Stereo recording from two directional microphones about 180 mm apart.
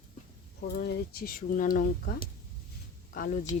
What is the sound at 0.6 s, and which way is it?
Speech, 60° left (ahead or behind).